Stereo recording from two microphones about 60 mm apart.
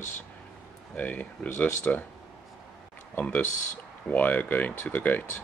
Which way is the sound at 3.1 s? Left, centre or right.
Left.